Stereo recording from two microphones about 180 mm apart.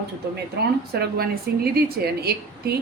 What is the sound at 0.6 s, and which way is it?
A woman's voice, 65° right (ahead or behind).